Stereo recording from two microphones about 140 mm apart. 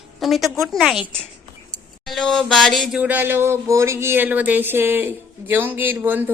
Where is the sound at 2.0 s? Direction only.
Centre (ahead or behind).